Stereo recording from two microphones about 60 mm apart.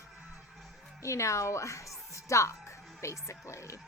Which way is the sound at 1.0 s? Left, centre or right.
Left.